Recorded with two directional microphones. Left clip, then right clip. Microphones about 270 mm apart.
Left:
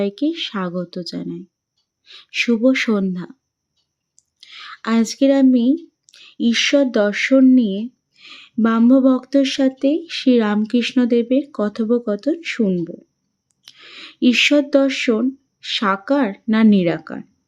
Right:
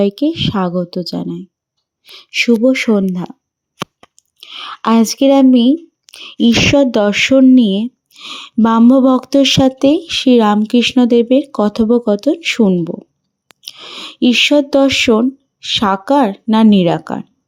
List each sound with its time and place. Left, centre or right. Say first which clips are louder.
0.0 s speech: right 6 dB; centre
4.4 s speech: right 9 dB; centre